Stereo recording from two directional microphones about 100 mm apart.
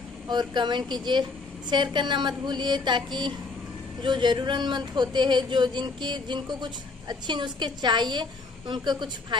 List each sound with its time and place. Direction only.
0.3 s speech: 45° right (ahead or behind)